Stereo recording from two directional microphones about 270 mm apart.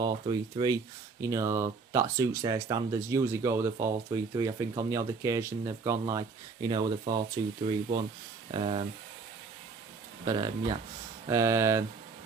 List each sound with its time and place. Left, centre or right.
0.0 s speech: centre
8.5 s speech: centre
10.2 s speech: centre